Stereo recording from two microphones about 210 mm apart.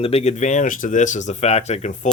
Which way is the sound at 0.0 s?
30° left (ahead or behind).